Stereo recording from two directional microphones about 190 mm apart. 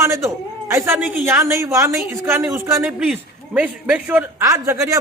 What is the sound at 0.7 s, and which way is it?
A man's voice, 15° right (ahead or behind).